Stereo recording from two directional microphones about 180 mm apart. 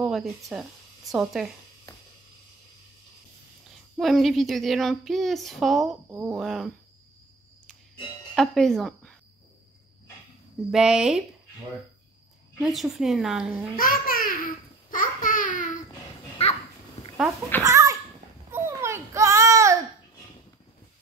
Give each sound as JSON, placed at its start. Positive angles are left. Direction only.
{"t": 0.0, "sound": "speech", "side_deg": 0}
{"t": 3.9, "sound": "a woman's voice", "side_deg": 0}
{"t": 6.0, "sound": "a woman's voice", "side_deg": -10}
{"t": 8.4, "sound": "speech", "side_deg": 0}
{"t": 10.7, "sound": "a woman's voice", "side_deg": -5}
{"t": 12.6, "sound": "a woman's voice", "side_deg": 0}
{"t": 13.7, "sound": "babbling", "side_deg": 50}
{"t": 16.4, "sound": "a sound", "side_deg": 35}
{"t": 17.6, "sound": "a sound", "side_deg": -15}
{"t": 18.5, "sound": "babbling", "side_deg": -15}